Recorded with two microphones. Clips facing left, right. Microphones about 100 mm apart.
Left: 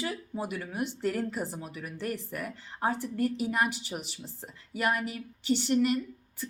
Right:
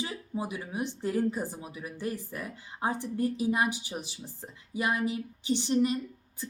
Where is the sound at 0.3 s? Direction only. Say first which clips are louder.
Right 2 dB; 15° right (ahead or behind).